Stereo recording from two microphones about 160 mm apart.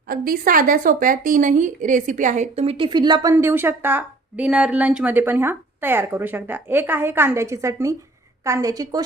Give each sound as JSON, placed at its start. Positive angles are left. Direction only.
{"t": 0.1, "sound": "a woman's voice", "side_deg": -65}
{"t": 3.3, "sound": "a woman's voice", "side_deg": -15}